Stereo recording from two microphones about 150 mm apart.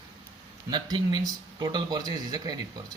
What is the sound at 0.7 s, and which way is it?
Speech, 30° right (ahead or behind).